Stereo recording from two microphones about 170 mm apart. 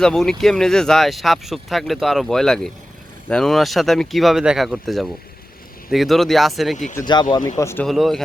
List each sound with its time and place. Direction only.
0.0 s speech: 5° left (ahead or behind)
6.9 s speech: 25° left (ahead or behind)
7.6 s speech: 15° left (ahead or behind)
7.9 s speech: centre (ahead or behind)